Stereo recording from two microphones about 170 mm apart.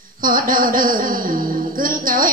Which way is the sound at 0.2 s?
55° right (ahead or behind).